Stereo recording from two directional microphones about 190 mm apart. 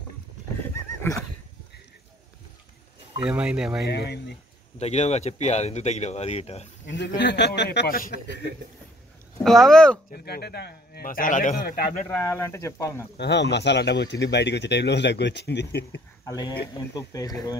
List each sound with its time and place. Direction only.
1.1 s speech: 10° left (ahead or behind)
3.2 s speech: 5° right (ahead or behind)
3.8 s speech: 60° left (ahead or behind)
4.7 s speech: 35° left (ahead or behind)
7.2 s speech: 65° left (ahead or behind)
9.4 s speech: centre (ahead or behind)
10.1 s a man's voice: 55° left (ahead or behind)
12.2 s speech: 15° left (ahead or behind)
13.2 s speech: 60° left (ahead or behind)
16.3 s speech: 20° left (ahead or behind)